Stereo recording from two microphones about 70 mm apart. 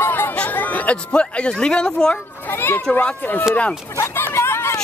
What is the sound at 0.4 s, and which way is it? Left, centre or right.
Speech, left.